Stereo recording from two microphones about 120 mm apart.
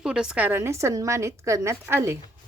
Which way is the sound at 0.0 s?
5° right (ahead or behind).